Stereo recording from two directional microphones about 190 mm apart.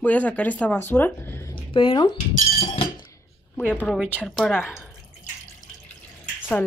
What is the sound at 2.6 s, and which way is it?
Chink, 20° left (ahead or behind).